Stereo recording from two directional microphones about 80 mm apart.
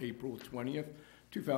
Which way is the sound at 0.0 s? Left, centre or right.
Right.